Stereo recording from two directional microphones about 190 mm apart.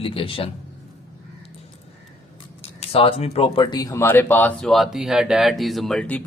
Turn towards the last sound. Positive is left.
turn(degrees=5)  # may be behind; listen again after turning